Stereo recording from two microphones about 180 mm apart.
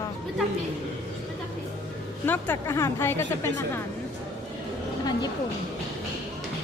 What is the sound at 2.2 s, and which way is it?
A woman's voice, 10° left (ahead or behind).